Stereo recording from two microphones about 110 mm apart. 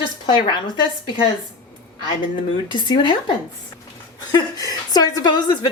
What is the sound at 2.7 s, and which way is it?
Speech, 45° left (ahead or behind).